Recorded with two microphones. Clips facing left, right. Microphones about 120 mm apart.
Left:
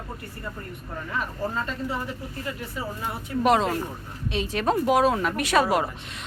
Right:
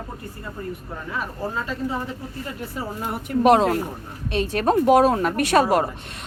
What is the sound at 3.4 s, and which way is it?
A woman's voice, 55° right (ahead or behind).